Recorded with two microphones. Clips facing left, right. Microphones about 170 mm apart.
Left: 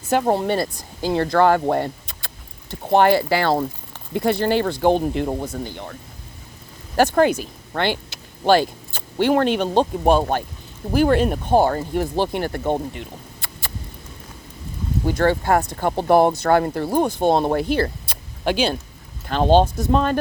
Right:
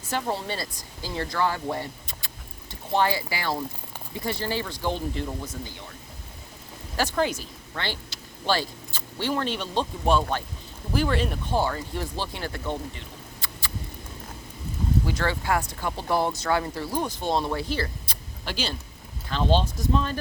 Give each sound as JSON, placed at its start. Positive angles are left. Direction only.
{"t": 0.1, "sound": "speech", "side_deg": 55}
{"t": 6.9, "sound": "speech", "side_deg": 55}
{"t": 13.4, "sound": "mouse", "side_deg": 55}
{"t": 15.0, "sound": "speech", "side_deg": 50}